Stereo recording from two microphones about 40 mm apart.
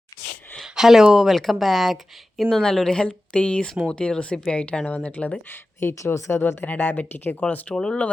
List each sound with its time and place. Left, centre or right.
0.6 s a sound: centre
1.0 s speech: centre
1.4 s speech: centre
2.4 s speech: centre
3.0 s speech: left
5.5 s speech: left
7.7 s speech: centre